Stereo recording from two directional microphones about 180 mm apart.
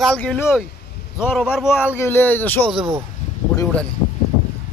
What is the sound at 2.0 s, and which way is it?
Speech, 10° left (ahead or behind).